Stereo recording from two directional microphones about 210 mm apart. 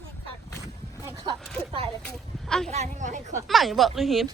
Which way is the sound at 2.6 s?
35° right (ahead or behind).